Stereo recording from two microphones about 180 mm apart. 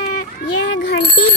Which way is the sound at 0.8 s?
60° left (ahead or behind).